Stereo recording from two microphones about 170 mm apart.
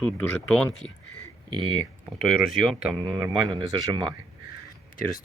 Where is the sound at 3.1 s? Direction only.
25° right (ahead or behind).